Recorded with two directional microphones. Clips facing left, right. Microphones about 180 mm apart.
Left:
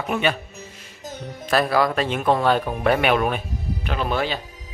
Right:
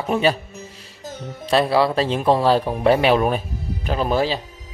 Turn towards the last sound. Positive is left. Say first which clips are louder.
# right 4 dB
turn(degrees=-35)  # may be behind; listen again after turning